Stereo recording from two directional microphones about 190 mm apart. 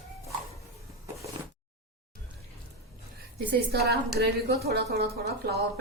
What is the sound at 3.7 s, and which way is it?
A woman's voice, 55° right (ahead or behind).